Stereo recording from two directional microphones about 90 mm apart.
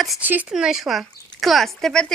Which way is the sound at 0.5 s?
5° right (ahead or behind).